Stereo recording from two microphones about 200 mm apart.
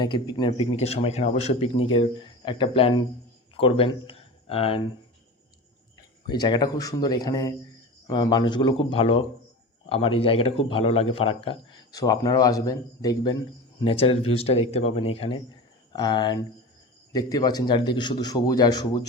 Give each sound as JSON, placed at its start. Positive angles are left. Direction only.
{"t": 0.0, "sound": "a man's voice", "side_deg": 20}
{"t": 6.2, "sound": "a man's voice", "side_deg": 20}